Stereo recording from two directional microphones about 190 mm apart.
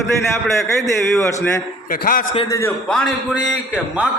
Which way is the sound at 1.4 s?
15° left (ahead or behind).